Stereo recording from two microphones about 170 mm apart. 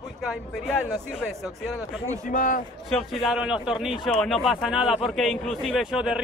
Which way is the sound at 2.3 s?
50° left (ahead or behind).